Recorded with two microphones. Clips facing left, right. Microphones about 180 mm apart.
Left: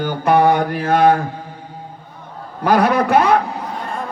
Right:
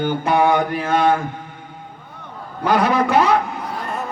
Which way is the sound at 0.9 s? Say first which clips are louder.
Left 5 dB; 55° left (ahead or behind).